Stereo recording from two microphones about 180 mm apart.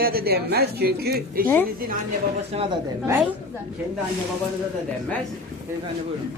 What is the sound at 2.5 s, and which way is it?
Speech, 30° right (ahead or behind).